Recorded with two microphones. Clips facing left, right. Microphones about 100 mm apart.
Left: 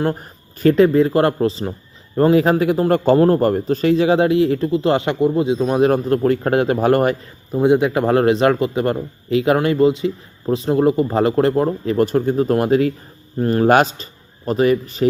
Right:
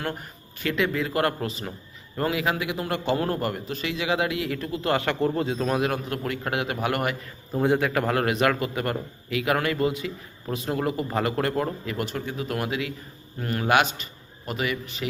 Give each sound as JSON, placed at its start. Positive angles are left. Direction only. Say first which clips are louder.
{"t": 0.0, "sound": "a man's voice", "louder": "left 11 dB", "side_deg": 35}
{"t": 7.5, "sound": "a man's voice", "louder": "left 8 dB", "side_deg": 20}